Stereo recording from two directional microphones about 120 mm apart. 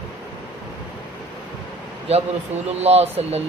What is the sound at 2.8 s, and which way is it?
Speech, 60° right (ahead or behind).